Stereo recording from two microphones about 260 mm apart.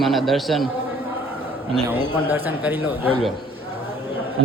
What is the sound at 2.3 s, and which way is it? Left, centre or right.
Speech, centre.